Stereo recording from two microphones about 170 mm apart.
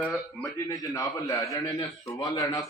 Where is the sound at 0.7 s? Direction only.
20° left (ahead or behind).